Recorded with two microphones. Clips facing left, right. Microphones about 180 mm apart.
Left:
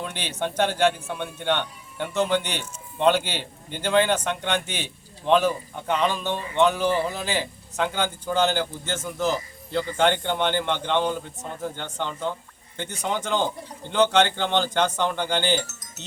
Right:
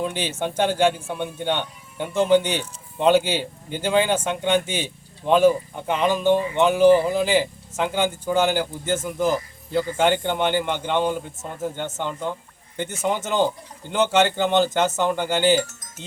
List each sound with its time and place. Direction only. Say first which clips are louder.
0.0 s a man's voice: right 4 dB; 10° right (ahead or behind)
15.6 s chime: right 3 dB; 50° right (ahead or behind)